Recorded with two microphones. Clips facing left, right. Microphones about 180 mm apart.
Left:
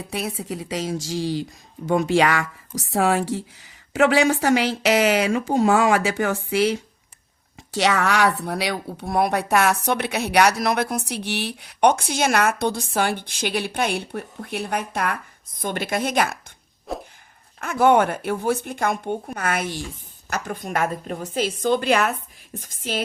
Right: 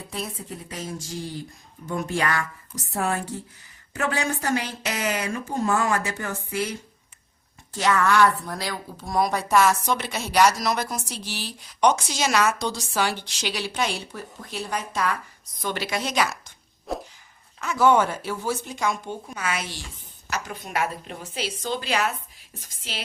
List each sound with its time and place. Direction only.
0.1 s a woman's voice: 75° left (ahead or behind)
9.0 s a woman's voice: 60° left (ahead or behind)
16.9 s a sound: centre (ahead or behind)
17.6 s a woman's voice: 55° left (ahead or behind)